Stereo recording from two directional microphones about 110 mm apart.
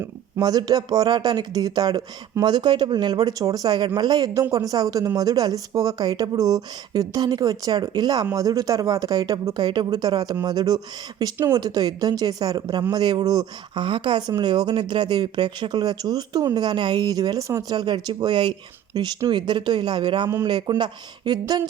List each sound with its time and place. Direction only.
0.3 s speech: 35° right (ahead or behind)